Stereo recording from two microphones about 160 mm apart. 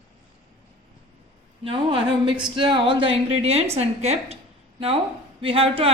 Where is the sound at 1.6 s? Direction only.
35° right (ahead or behind).